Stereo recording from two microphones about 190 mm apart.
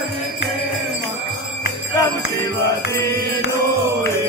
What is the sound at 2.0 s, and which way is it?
Music, 15° left (ahead or behind).